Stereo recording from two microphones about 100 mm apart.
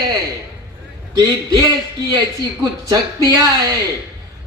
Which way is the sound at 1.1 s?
40° right (ahead or behind).